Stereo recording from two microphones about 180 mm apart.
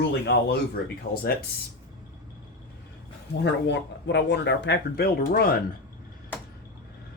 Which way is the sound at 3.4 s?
75° left (ahead or behind).